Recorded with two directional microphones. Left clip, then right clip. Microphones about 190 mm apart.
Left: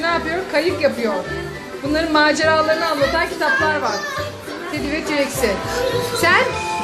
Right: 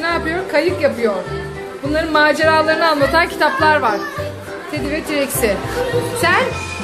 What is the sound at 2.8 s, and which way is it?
Speech, 15° right (ahead or behind).